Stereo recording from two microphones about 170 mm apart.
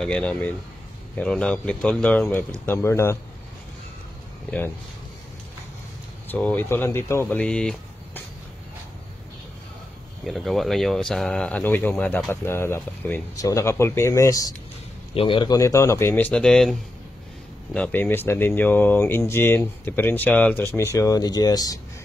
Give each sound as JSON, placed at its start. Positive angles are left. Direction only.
{"t": 0.0, "sound": "speech", "side_deg": 5}
{"t": 6.2, "sound": "speech", "side_deg": 10}
{"t": 10.2, "sound": "speech", "side_deg": 0}
{"t": 15.1, "sound": "speech", "side_deg": 30}
{"t": 17.7, "sound": "speech", "side_deg": 10}